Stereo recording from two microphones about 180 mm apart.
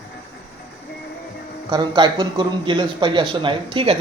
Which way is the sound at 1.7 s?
25° right (ahead or behind).